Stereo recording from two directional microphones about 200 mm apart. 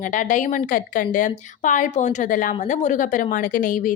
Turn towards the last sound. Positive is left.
turn(degrees=45)  # may be behind; listen again after turning